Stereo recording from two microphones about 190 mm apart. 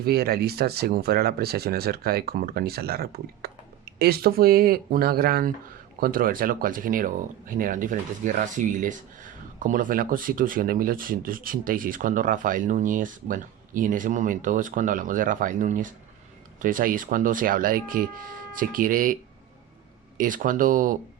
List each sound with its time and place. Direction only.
0.0 s speech: 55° right (ahead or behind)
20.1 s speech: 45° right (ahead or behind)